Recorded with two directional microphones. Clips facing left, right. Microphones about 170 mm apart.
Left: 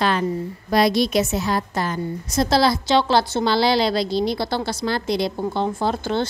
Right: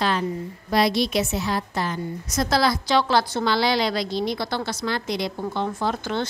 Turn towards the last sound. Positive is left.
turn(degrees=30)  # may be behind; listen again after turning